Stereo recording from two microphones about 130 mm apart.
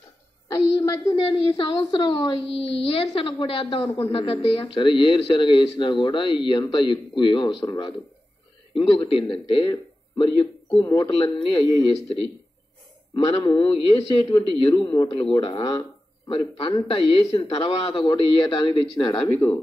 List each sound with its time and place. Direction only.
0.7 s a sound: 25° left (ahead or behind)
1.5 s a woman's voice: 45° left (ahead or behind)
9.3 s a man's voice: 40° left (ahead or behind)
11.7 s a woman's voice: 45° left (ahead or behind)
16.5 s a woman's voice: 45° left (ahead or behind)
19.1 s speech: 15° left (ahead or behind)